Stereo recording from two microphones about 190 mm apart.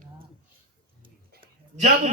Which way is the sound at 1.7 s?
40° right (ahead or behind).